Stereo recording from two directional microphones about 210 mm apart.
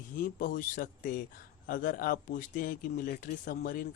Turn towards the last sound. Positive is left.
turn(degrees=40)  # may be behind; listen again after turning